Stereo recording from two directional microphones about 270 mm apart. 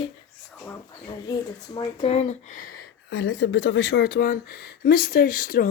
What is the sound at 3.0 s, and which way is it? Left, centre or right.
A woman's voice, left.